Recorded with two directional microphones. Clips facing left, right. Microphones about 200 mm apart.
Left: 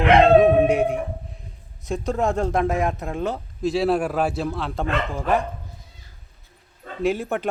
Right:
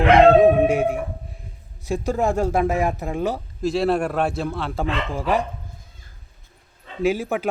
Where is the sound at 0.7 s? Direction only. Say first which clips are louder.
Even; 5° right (ahead or behind).